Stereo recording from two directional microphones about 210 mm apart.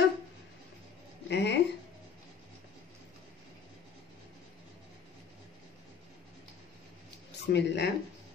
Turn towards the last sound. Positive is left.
turn(degrees=50)  # may be behind; listen again after turning